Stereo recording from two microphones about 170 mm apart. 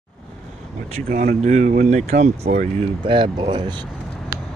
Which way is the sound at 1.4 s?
45° right (ahead or behind).